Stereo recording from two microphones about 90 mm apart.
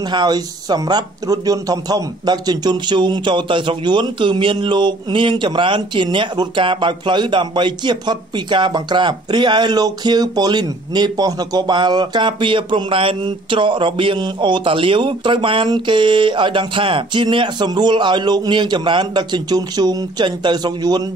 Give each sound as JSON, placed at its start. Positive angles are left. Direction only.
{"t": 0.0, "sound": "speech", "side_deg": -50}